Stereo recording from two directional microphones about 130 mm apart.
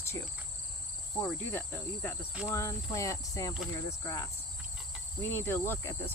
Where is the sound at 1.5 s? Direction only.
15° left (ahead or behind).